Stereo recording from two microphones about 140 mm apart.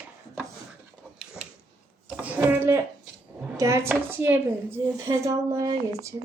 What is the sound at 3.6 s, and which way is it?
A woman's voice, 20° right (ahead or behind).